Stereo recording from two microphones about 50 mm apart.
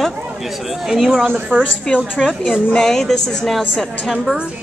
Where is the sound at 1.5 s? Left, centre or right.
Right.